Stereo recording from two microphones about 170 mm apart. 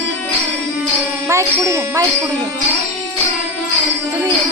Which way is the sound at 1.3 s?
15° right (ahead or behind).